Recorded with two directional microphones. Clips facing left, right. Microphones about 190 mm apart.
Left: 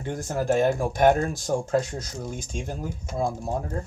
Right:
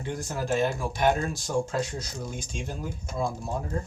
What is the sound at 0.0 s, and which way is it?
Speech, 50° left (ahead or behind).